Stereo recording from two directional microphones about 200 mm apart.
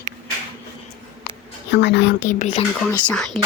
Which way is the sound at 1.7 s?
60° left (ahead or behind).